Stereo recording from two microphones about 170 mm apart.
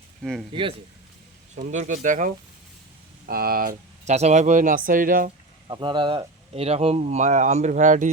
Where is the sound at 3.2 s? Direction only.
60° right (ahead or behind).